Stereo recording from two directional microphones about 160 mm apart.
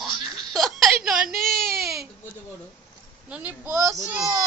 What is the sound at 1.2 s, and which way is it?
Whimper, 65° right (ahead or behind).